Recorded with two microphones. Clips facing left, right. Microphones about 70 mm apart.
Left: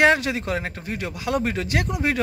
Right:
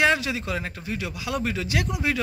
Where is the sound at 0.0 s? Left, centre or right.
Left.